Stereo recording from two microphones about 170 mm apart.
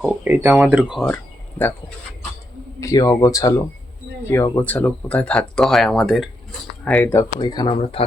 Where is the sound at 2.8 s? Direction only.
20° left (ahead or behind).